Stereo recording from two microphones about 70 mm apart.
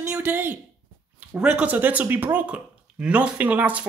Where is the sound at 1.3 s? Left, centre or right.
Centre.